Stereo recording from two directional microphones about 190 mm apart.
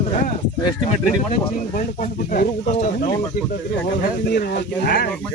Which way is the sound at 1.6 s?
45° left (ahead or behind).